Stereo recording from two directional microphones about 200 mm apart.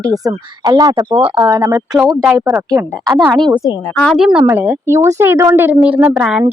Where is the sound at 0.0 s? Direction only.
15° right (ahead or behind).